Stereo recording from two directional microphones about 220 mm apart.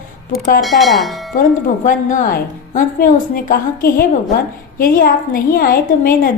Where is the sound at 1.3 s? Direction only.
40° left (ahead or behind).